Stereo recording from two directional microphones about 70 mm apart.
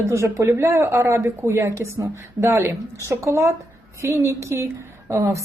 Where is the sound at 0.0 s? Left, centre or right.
Right.